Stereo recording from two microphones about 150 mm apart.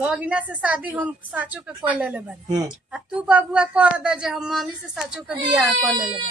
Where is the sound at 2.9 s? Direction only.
5° right (ahead or behind).